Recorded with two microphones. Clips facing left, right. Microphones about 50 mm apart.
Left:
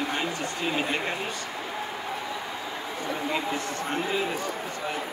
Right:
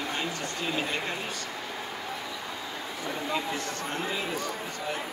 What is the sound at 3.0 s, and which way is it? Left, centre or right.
Speech, left.